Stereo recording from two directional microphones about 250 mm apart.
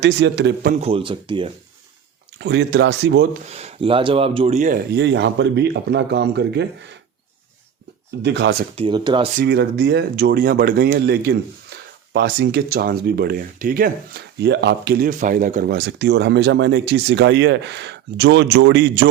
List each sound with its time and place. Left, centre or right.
0.0 s speech: right; by 1.5 s centre
2.4 s a man's voice: right
3.5 s speech: right
4.9 s a man's voice: right
8.2 s a man's voice: right
8.7 s speech: centre
9.4 s speech: right